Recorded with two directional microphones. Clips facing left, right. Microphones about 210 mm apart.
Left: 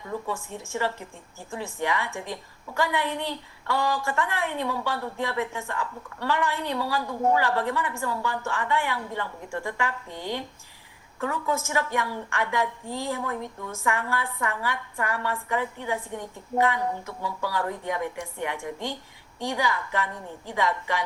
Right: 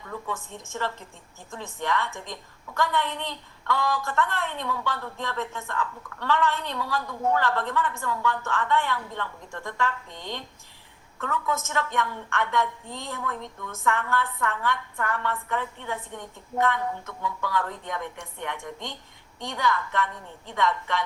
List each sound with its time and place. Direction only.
0.5 s a woman's voice: 10° left (ahead or behind)
11.7 s a woman's voice: 10° left (ahead or behind)